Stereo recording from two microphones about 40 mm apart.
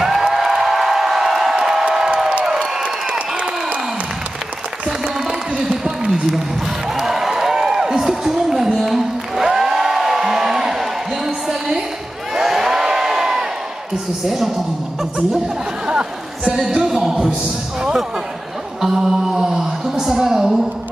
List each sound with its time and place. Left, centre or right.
0.0 s music: centre
2.4 s crowd: centre
2.8 s crowd: right
4.8 s applause: centre
5.6 s a sound: centre
12.4 s crowd: centre
14.2 s a man's voice: centre
15.3 s chatter: centre
16.7 s a sound: centre
18.8 s a sound: centre